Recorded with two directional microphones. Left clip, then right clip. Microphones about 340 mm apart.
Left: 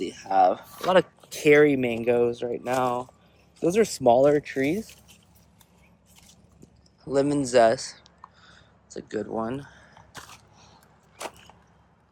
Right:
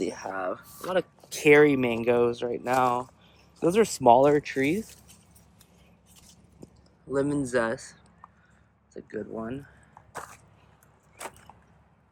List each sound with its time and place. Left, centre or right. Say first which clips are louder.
0.3 s speech: left 15 dB; centre
0.8 s speech: left 7 dB; centre
1.3 s speech: even; centre
7.1 s speech: left 4 dB; centre